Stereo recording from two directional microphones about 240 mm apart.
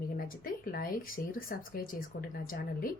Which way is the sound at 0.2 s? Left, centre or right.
Left.